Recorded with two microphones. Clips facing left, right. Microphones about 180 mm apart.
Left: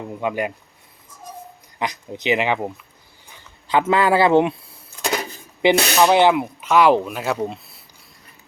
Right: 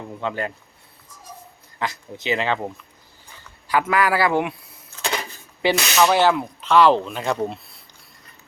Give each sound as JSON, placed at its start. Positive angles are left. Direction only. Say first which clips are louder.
{"t": 0.2, "sound": "speech", "louder": "left 3 dB", "side_deg": 15}
{"t": 1.8, "sound": "speech", "louder": "left 3 dB", "side_deg": 20}
{"t": 3.7, "sound": "a man's voice", "louder": "left 3 dB", "side_deg": 25}
{"t": 4.9, "sound": "a sound", "louder": "left 3 dB", "side_deg": 10}
{"t": 5.6, "sound": "a man's voice", "louder": "left 3 dB", "side_deg": 20}